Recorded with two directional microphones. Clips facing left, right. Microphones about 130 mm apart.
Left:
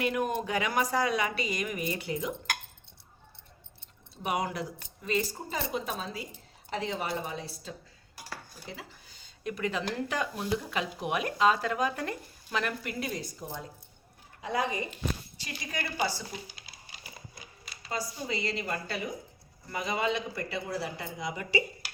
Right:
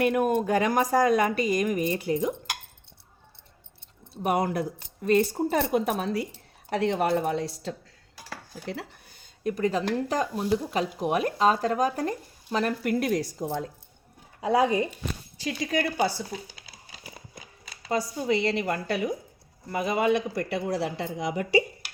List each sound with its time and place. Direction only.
0.0 s speech: 50° right (ahead or behind)
4.2 s speech: 50° right (ahead or behind)
12.8 s speech: 60° right (ahead or behind); by 13.7 s 85° right
15.4 s speech: 90° right
15.8 s speech: 55° right (ahead or behind)
17.8 s speech: 65° right (ahead or behind)
19.7 s speech: 55° right (ahead or behind); by 21.6 s 80° right